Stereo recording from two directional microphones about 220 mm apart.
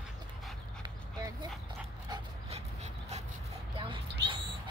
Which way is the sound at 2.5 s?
30° right (ahead or behind).